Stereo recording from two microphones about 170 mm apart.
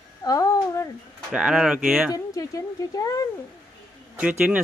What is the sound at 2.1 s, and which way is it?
Speech, 20° left (ahead or behind).